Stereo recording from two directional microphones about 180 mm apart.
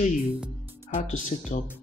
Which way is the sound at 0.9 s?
45° left (ahead or behind).